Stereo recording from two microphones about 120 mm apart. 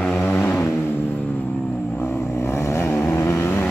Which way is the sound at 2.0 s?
20° left (ahead or behind).